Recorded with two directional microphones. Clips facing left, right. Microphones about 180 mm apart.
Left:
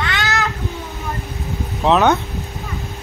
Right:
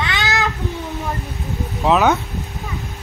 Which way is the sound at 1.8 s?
5° right (ahead or behind).